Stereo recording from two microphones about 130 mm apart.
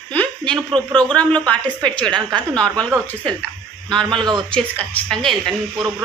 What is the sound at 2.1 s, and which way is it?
Speech, 35° right (ahead or behind).